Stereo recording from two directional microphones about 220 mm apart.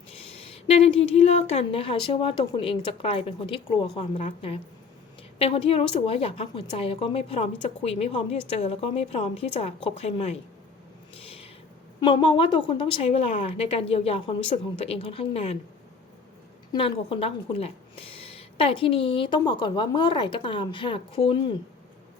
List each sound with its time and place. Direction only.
0.1 s a woman's voice: 25° left (ahead or behind)
11.1 s a sound: 25° left (ahead or behind)
11.9 s a woman's voice: 20° left (ahead or behind)
16.7 s a woman's voice: 25° left (ahead or behind)